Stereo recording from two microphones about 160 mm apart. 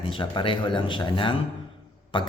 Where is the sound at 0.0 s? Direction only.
30° left (ahead or behind).